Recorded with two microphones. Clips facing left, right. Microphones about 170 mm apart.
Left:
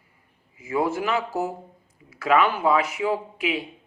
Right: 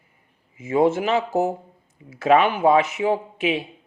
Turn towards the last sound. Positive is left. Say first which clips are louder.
# right 3 dB
turn(degrees=-25)  # may be behind; listen again after turning